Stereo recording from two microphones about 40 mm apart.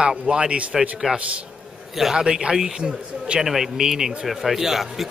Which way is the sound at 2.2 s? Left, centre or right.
Right.